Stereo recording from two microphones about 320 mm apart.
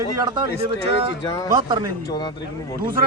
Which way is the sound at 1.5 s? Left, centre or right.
Centre.